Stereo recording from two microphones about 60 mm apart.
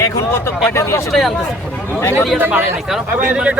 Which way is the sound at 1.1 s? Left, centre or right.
Centre.